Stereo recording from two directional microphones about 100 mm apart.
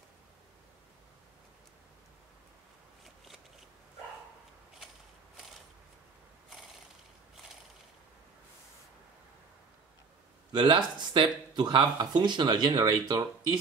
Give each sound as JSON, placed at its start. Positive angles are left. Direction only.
{"t": 10.5, "sound": "speech", "side_deg": -50}